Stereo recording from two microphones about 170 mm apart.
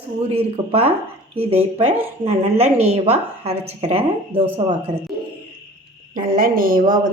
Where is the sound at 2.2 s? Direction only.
40° right (ahead or behind).